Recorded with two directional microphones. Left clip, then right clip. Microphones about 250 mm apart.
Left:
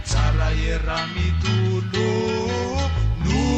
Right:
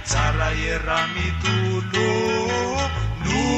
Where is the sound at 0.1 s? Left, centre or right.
Centre.